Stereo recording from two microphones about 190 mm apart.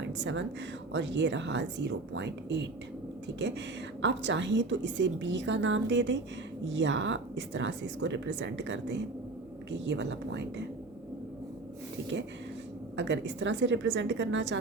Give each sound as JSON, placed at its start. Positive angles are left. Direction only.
{"t": 0.2, "sound": "speech", "side_deg": -70}
{"t": 13.0, "sound": "speech", "side_deg": -70}